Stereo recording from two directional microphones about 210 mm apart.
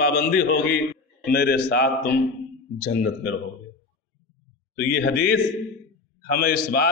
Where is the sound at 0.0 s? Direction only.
50° left (ahead or behind).